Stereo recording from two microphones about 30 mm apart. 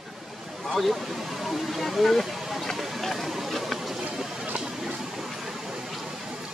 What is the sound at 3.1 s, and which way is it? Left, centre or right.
Chatter, centre.